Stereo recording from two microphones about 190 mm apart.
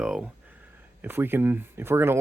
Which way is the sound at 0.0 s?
5° right (ahead or behind).